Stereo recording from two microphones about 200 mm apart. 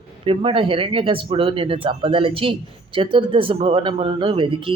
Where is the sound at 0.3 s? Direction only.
25° right (ahead or behind).